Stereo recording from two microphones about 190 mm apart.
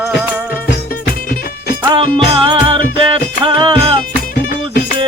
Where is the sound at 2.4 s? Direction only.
25° right (ahead or behind).